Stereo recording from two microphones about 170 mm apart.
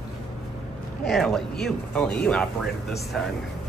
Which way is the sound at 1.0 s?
Centre (ahead or behind).